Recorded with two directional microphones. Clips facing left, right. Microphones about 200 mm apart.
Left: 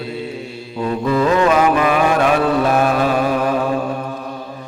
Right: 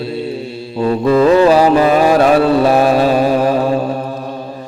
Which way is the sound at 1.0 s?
30° right (ahead or behind).